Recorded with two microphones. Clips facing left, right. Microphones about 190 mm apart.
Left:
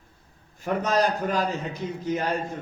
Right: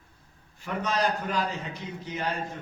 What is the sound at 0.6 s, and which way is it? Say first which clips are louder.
A man's voice: left 5 dB; 45° left (ahead or behind).